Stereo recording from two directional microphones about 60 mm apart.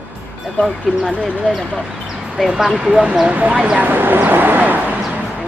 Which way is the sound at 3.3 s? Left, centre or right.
Right.